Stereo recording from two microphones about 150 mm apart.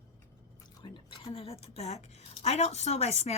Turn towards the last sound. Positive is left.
turn(degrees=45)  # may be behind; listen again after turning